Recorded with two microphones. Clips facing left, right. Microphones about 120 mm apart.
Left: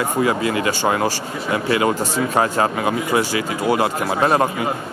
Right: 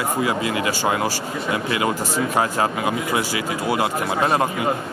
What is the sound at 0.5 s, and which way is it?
Speech, 15° right (ahead or behind).